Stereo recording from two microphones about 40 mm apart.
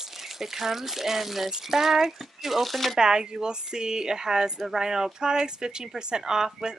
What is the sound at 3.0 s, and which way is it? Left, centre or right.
Speech, centre.